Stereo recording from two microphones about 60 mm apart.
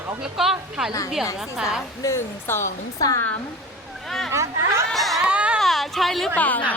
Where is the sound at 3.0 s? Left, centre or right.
Left.